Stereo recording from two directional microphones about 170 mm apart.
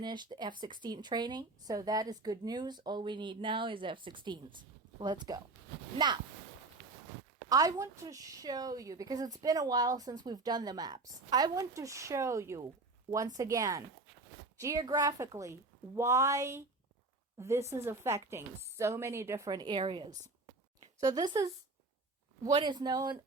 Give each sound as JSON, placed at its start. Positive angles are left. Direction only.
{"t": 0.0, "sound": "a woman's voice", "side_deg": -25}
{"t": 7.5, "sound": "a woman's voice", "side_deg": -20}
{"t": 22.5, "sound": "a woman's voice", "side_deg": -25}